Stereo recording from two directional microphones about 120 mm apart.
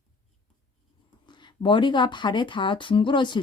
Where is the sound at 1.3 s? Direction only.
40° left (ahead or behind).